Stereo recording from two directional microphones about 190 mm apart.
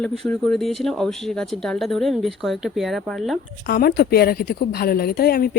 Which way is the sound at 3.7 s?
55° left (ahead or behind).